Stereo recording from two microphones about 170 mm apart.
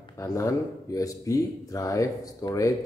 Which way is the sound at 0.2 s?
20° left (ahead or behind).